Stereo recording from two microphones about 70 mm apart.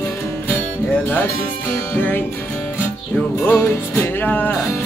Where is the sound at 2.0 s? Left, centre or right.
Left.